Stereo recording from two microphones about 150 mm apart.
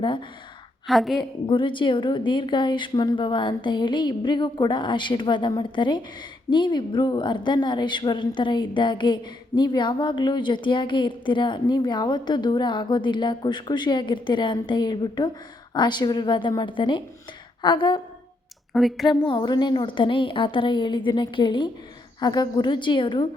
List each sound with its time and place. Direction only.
0.9 s a woman's voice: centre (ahead or behind)
1.2 s a woman's voice: 30° left (ahead or behind)
18.7 s a woman's voice: centre (ahead or behind)
19.2 s a woman's voice: 35° left (ahead or behind)